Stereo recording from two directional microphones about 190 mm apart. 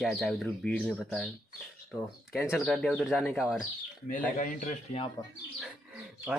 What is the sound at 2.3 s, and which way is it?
Speech, centre (ahead or behind).